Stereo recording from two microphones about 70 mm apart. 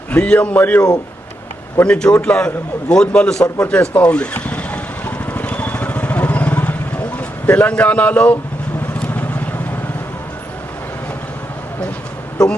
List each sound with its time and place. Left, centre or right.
0.1 s a man's voice: centre
3.6 s vehicle: left